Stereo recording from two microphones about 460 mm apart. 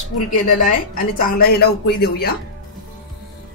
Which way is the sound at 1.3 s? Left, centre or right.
Centre.